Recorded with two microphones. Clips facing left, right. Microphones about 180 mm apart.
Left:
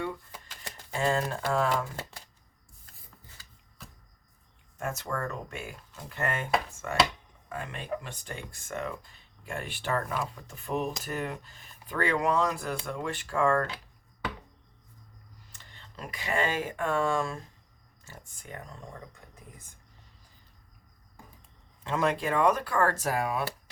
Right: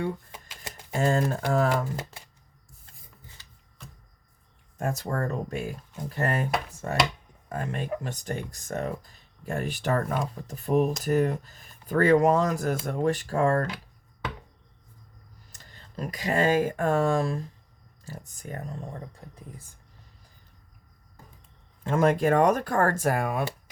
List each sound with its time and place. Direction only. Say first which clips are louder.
0.9 s speech: right 4 dB; 45° right (ahead or behind)
4.8 s speech: right 4 dB; 35° right (ahead or behind)
15.5 s speech: right 9 dB; 40° right (ahead or behind)
21.8 s speech: right 6 dB; 45° right (ahead or behind)